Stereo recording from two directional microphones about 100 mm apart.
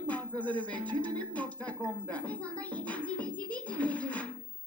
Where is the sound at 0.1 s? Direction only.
15° left (ahead or behind).